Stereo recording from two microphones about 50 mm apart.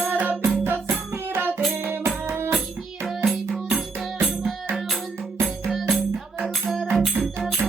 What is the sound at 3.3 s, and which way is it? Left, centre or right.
Music, centre.